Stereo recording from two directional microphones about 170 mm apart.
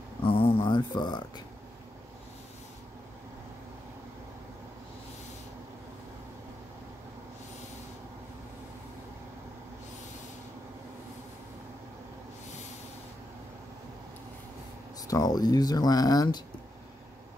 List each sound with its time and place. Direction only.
0.2 s speech: 30° left (ahead or behind)
15.0 s speech: 20° left (ahead or behind)